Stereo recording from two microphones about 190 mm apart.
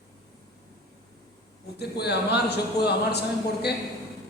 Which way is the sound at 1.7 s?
60° left (ahead or behind).